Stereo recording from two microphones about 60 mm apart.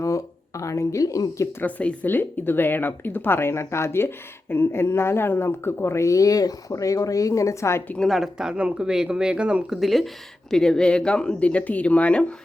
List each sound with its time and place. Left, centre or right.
0.0 s speech: left
1.6 s speech: left
2.0 s speech: left
8.0 s speech: centre
9.8 s speech: centre
10.5 s speech: centre